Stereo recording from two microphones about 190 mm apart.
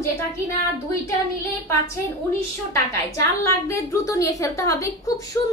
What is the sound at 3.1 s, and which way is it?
A woman's voice, 15° left (ahead or behind).